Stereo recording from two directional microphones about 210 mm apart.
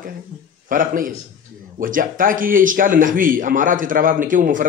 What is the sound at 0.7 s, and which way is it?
Speech, 40° right (ahead or behind).